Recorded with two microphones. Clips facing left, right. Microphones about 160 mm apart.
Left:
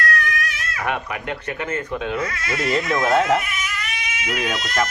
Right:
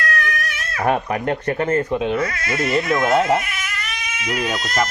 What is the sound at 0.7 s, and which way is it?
Speech, 40° right (ahead or behind).